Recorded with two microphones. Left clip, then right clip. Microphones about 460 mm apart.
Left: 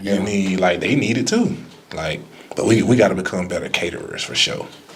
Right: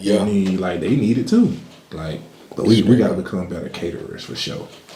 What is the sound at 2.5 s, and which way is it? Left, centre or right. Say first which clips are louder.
Speech: left 1 dB; left.